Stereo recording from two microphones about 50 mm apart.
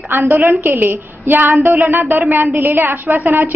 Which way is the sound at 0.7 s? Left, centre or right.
Right.